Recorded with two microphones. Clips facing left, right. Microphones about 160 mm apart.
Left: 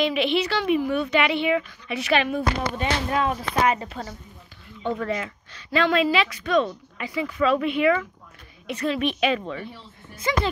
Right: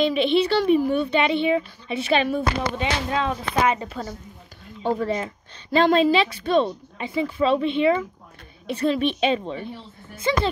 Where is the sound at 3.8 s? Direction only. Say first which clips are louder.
Right 3 dB; 35° right (ahead or behind).